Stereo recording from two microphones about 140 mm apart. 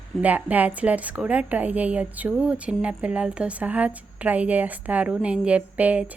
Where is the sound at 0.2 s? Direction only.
10° right (ahead or behind).